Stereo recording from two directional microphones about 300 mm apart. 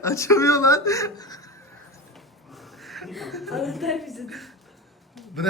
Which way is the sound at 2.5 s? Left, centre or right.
Centre.